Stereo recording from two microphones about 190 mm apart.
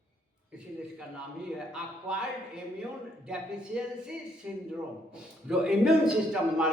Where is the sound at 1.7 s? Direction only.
5° right (ahead or behind).